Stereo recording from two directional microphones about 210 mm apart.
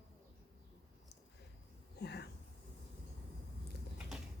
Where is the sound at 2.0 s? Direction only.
50° left (ahead or behind).